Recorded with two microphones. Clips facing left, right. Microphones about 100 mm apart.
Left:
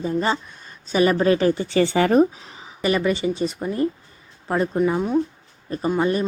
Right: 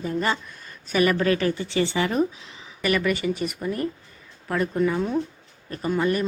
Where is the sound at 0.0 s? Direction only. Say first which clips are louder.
Left 3 dB; 25° left (ahead or behind).